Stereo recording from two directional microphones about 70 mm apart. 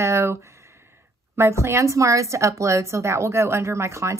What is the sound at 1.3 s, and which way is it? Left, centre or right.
Speech, right.